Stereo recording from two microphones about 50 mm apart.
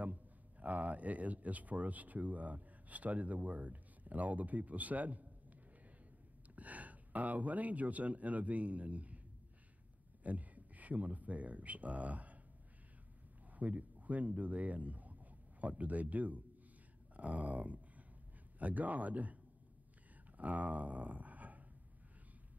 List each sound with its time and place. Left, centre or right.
0.0 s speech: right
6.5 s speech: right
10.2 s speech: right
13.5 s speech: right
17.2 s a sound: right
18.6 s a man's voice: right
20.3 s a sound: right